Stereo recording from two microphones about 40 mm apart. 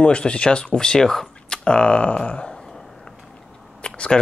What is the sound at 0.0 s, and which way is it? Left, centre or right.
Speech, left.